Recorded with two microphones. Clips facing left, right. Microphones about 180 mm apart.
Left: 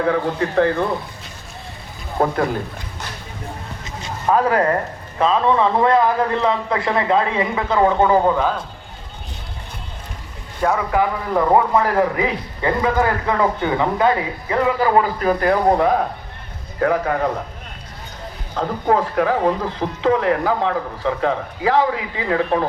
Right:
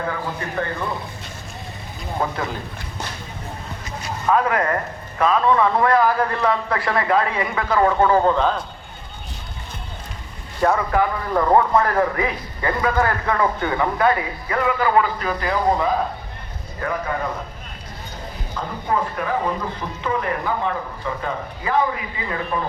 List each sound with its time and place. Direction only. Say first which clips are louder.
0.0 s speech: left 8 dB; 70° left (ahead or behind)
2.1 s speech: left 6 dB; 50° left (ahead or behind)
4.0 s a man's voice: left 2 dB; 35° left (ahead or behind); by 8.5 s 10° left (ahead or behind)
10.6 s a man's voice: even; 5° left (ahead or behind); by 16.0 s 60° left (ahead or behind)
16.8 s speech: left 7 dB; 70° left (ahead or behind)
18.5 s speech: left 6 dB; 80° left